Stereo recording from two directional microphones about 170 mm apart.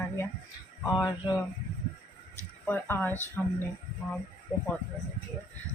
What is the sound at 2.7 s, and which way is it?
Speech, 10° left (ahead or behind).